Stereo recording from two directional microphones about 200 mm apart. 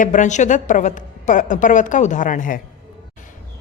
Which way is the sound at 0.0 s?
40° left (ahead or behind).